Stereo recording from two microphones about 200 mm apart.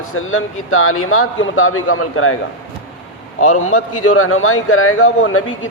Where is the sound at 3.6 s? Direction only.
90° left.